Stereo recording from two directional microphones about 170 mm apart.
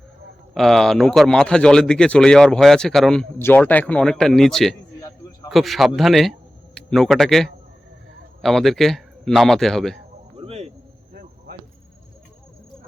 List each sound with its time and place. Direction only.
0.5 s a man's voice: centre (ahead or behind)
10.3 s cricket: 35° right (ahead or behind)
11.1 s insect: 65° right (ahead or behind)